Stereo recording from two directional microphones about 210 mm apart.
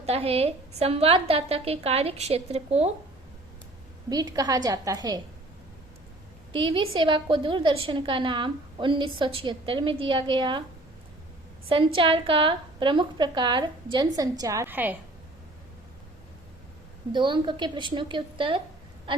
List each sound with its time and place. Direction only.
0.0 s a woman's voice: 30° right (ahead or behind)
4.1 s a woman's voice: 15° right (ahead or behind)
6.5 s a woman's voice: 25° right (ahead or behind)
11.7 s a woman's voice: 25° right (ahead or behind); by 14.9 s 10° right (ahead or behind)
17.1 s a woman's voice: 20° right (ahead or behind)